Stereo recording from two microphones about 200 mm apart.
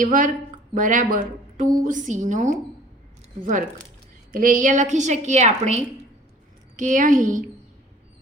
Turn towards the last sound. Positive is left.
turn(degrees=-40)  # may be behind; listen again after turning